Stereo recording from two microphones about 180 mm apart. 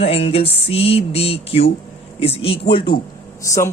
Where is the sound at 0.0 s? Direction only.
30° left (ahead or behind).